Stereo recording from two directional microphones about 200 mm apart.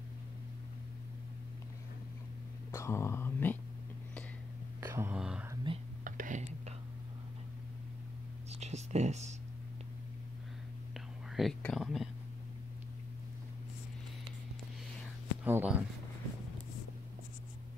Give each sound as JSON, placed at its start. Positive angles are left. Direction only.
{"t": 2.7, "sound": "speech", "side_deg": 15}
{"t": 4.7, "sound": "a sound", "side_deg": -10}
{"t": 5.5, "sound": "whispering", "side_deg": -25}
{"t": 6.0, "sound": "whispering", "side_deg": -40}
{"t": 8.5, "sound": "a sound", "side_deg": -35}
{"t": 11.3, "sound": "speech", "side_deg": 0}
{"t": 15.4, "sound": "speech", "side_deg": -10}